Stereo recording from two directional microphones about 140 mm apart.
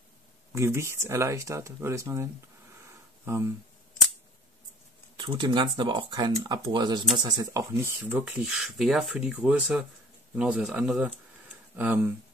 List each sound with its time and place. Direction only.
0.6 s speech: 20° right (ahead or behind)
3.3 s speech: 20° right (ahead or behind)
5.2 s speech: 35° right (ahead or behind); by 12.1 s 15° right (ahead or behind)